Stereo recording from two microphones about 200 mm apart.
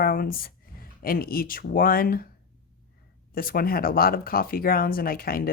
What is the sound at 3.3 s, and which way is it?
Speech, 45° left (ahead or behind).